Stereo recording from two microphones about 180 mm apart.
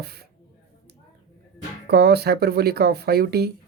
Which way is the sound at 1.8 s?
65° right (ahead or behind).